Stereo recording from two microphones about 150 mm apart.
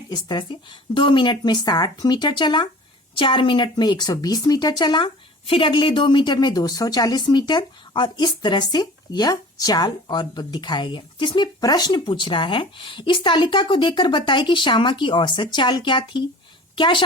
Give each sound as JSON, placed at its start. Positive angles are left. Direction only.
{"t": 0.1, "sound": "a woman's voice", "side_deg": 30}